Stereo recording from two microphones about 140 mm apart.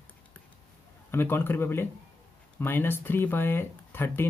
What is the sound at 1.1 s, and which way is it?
Speech, 15° left (ahead or behind).